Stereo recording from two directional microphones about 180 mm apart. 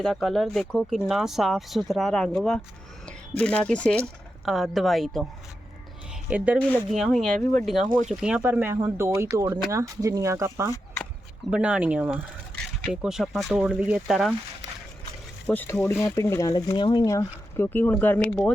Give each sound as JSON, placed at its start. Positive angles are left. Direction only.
{"t": 0.0, "sound": "speech", "side_deg": 0}
{"t": 6.3, "sound": "speech", "side_deg": -10}
{"t": 7.9, "sound": "speech", "side_deg": -50}
{"t": 8.1, "sound": "speech", "side_deg": -5}
{"t": 15.4, "sound": "speech", "side_deg": 10}